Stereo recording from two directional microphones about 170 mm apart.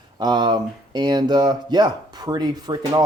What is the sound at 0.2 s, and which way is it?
Speech, 25° right (ahead or behind).